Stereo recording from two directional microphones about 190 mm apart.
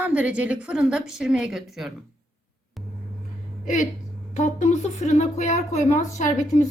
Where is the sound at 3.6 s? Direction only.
40° left (ahead or behind).